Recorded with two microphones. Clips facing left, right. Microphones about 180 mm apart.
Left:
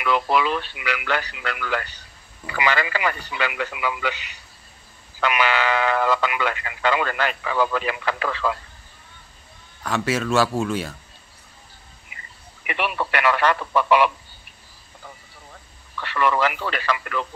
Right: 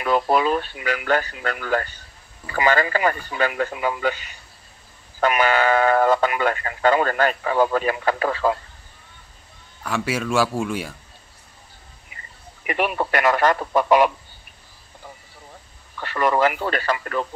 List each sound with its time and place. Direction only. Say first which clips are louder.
0.0 s speech: right 2 dB; 40° right (ahead or behind)
5.2 s speech: right 3 dB; 45° right (ahead or behind)
9.8 s a man's voice: left 1 dB; 10° right (ahead or behind)
12.6 s speech: right 3 dB; 40° right (ahead or behind)
16.0 s speech: right 2 dB; 40° right (ahead or behind)